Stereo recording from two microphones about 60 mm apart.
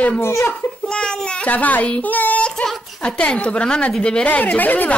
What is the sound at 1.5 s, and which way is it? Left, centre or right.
Speech, left.